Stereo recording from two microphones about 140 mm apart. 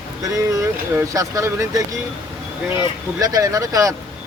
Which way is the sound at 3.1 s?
25° right (ahead or behind).